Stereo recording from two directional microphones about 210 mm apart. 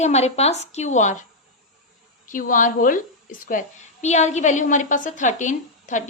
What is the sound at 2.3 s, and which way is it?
A woman's voice, 40° left (ahead or behind).